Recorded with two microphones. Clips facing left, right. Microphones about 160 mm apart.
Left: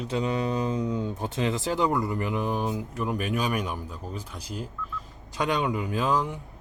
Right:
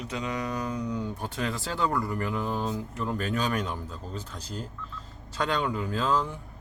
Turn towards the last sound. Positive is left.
turn(degrees=15)  # may be behind; listen again after turning